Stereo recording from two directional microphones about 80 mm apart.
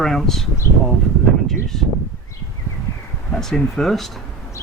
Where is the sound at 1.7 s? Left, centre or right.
Centre.